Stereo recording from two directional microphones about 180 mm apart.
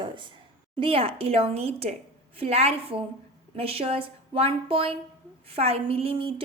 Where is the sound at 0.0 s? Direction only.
25° right (ahead or behind).